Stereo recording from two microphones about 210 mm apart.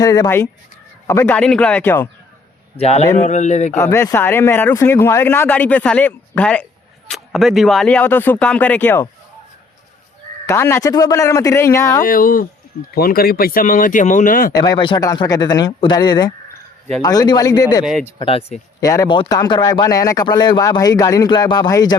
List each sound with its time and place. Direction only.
0.0 s speech: 15° left (ahead or behind)
2.7 s speech: 30° left (ahead or behind)
3.8 s speech: 15° left (ahead or behind)
10.4 s speech: 15° left (ahead or behind)
12.0 s speech: 40° left (ahead or behind)
14.5 s speech: 20° left (ahead or behind)
18.8 s speech: 15° left (ahead or behind)